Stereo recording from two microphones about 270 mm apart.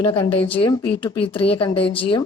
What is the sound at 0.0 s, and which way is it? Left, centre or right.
A woman's voice, centre.